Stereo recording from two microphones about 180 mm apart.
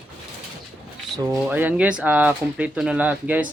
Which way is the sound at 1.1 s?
20° right (ahead or behind).